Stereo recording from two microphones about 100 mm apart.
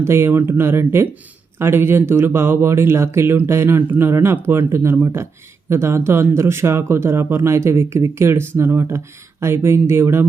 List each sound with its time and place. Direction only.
0.0 s speech: 25° right (ahead or behind)